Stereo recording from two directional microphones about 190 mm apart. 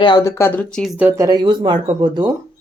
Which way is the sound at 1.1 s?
20° right (ahead or behind).